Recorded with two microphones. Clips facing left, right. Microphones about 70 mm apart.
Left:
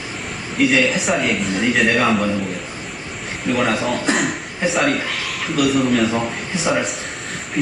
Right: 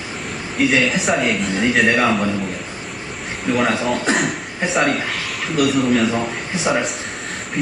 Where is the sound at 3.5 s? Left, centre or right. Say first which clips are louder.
Right 1 dB; centre.